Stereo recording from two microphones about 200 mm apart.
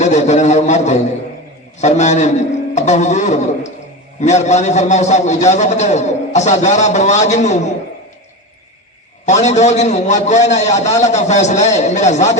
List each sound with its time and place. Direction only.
0.0 s a sound: 35° left (ahead or behind)
1.8 s a man's voice: 35° left (ahead or behind)
9.2 s a man's voice: 35° left (ahead or behind)